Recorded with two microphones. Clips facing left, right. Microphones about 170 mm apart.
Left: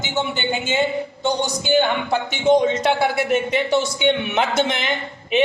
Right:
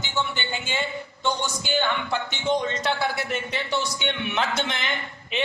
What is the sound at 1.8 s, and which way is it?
Speech, 50° left (ahead or behind).